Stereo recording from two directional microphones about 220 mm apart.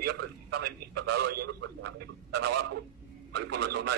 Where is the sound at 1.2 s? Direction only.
90° right.